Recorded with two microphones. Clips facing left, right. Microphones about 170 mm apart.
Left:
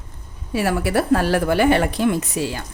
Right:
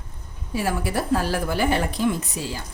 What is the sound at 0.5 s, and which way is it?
A woman's voice, 70° left (ahead or behind).